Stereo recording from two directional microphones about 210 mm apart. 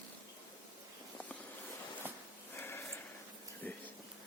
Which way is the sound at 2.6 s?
10° left (ahead or behind).